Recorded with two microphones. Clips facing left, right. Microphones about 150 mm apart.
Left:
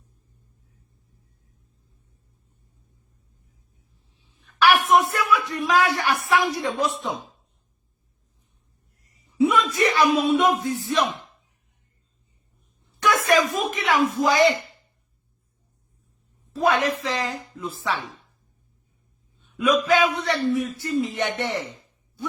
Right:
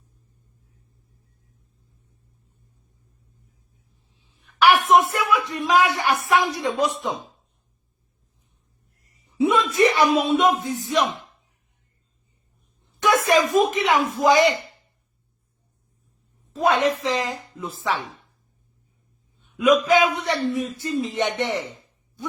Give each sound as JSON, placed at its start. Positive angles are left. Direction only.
{"t": 4.9, "sound": "speech", "side_deg": -20}
{"t": 9.5, "sound": "a sound", "side_deg": -25}
{"t": 10.2, "sound": "speech", "side_deg": -20}
{"t": 13.0, "sound": "a sound", "side_deg": -25}
{"t": 14.2, "sound": "speech", "side_deg": -20}
{"t": 16.5, "sound": "speech", "side_deg": -20}
{"t": 19.5, "sound": "a man's voice", "side_deg": -15}